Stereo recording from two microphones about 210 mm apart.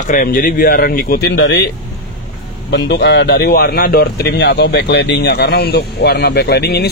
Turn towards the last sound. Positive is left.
turn(degrees=50)  # may be behind; listen again after turning